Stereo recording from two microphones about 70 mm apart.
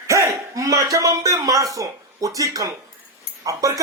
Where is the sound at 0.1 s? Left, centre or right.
Right.